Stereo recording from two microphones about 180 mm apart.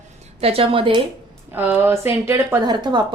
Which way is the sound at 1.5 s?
10° right (ahead or behind).